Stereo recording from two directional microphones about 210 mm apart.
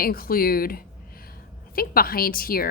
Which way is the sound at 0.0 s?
45° left (ahead or behind).